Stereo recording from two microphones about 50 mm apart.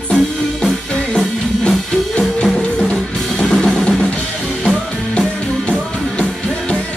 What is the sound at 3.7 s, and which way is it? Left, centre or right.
Drum kit, centre.